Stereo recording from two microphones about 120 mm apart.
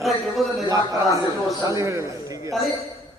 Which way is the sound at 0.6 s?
30° right (ahead or behind).